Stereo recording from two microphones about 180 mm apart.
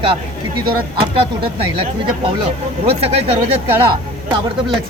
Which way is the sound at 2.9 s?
35° right (ahead or behind).